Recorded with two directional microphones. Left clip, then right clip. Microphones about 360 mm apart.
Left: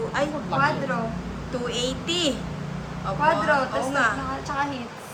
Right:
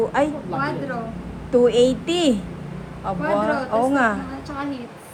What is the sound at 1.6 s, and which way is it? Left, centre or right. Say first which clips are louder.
Speech: right 9 dB; centre.